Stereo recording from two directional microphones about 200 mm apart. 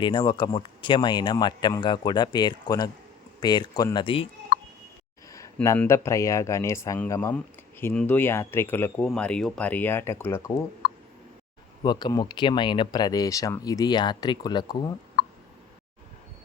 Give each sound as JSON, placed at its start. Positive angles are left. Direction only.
{"t": 0.0, "sound": "speech", "side_deg": 25}
{"t": 5.3, "sound": "speech", "side_deg": 15}
{"t": 11.8, "sound": "speech", "side_deg": 20}